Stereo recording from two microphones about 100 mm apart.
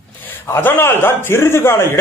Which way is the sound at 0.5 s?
20° left (ahead or behind).